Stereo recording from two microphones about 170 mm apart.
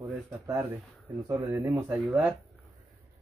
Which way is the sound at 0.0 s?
15° right (ahead or behind).